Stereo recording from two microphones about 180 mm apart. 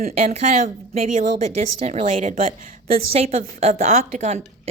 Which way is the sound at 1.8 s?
35° right (ahead or behind).